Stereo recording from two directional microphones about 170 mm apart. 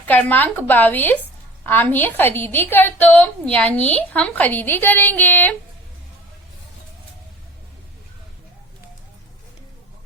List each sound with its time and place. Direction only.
0.1 s a woman's voice: 10° left (ahead or behind)